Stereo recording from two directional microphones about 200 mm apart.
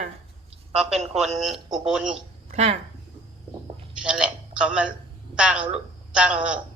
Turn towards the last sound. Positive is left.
turn(degrees=-5)  # may be behind; listen again after turning